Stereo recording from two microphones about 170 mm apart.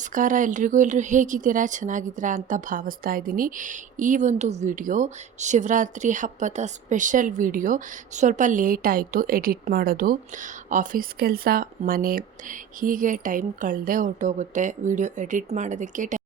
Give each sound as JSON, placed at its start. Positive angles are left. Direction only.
{"t": 0.1, "sound": "speech", "side_deg": -50}